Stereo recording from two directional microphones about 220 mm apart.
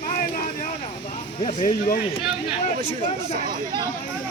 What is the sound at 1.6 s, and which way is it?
Speech, 40° left (ahead or behind).